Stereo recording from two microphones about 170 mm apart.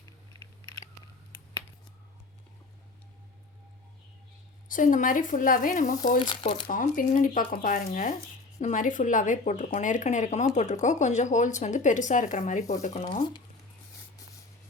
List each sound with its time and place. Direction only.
4.7 s speech: 50° left (ahead or behind)
6.1 s speech: 30° left (ahead or behind)
6.7 s speech: 55° left (ahead or behind)